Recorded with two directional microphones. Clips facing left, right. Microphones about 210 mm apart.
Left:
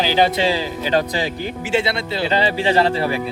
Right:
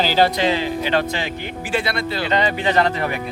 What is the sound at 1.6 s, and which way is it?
Speech, 25° left (ahead or behind).